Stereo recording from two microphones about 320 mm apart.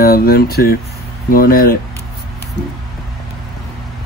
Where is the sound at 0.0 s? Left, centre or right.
Left.